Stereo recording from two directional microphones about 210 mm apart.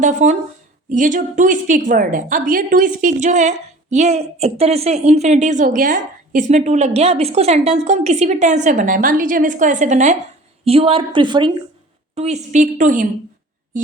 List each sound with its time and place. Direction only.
0.0 s a woman's voice: 35° right (ahead or behind)